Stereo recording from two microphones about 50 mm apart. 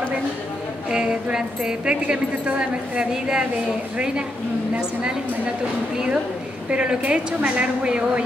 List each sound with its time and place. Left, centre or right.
0.8 s a woman's voice: centre
6.7 s a woman's voice: right